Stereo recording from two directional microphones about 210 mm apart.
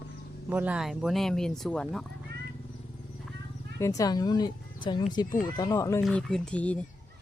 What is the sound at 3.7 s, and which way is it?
A woman's voice, 15° left (ahead or behind).